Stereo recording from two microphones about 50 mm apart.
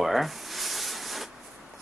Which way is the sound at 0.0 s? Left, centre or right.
Centre.